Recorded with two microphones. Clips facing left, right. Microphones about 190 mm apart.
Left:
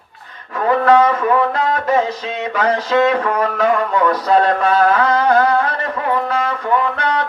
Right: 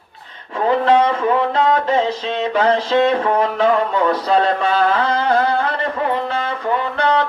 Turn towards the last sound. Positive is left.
turn(degrees=-30)  # may be behind; listen again after turning